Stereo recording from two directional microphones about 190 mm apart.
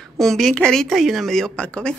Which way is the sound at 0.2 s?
Centre (ahead or behind).